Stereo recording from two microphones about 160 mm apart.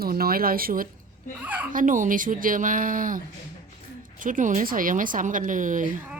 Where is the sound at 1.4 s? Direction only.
10° right (ahead or behind).